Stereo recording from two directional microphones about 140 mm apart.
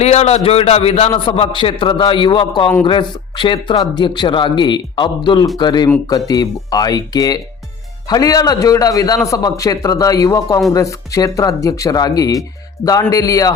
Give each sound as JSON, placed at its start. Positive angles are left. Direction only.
{"t": 0.0, "sound": "a man's voice", "side_deg": 50}